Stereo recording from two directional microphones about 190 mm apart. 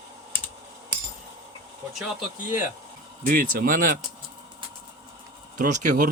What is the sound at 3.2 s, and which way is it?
Speech, 45° right (ahead or behind).